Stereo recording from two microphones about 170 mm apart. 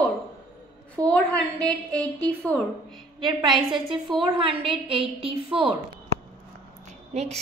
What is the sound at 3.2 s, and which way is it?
A woman's voice, 25° right (ahead or behind).